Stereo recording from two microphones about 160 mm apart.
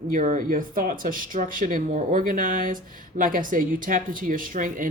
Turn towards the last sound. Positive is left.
turn(degrees=-55)  # may be behind; listen again after turning